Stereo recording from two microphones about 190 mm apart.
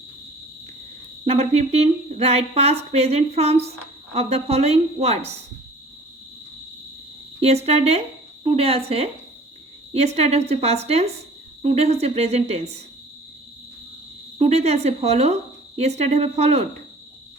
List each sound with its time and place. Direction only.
1.2 s speech: 35° right (ahead or behind)
7.3 s speech: 35° right (ahead or behind)
14.3 s speech: 35° right (ahead or behind)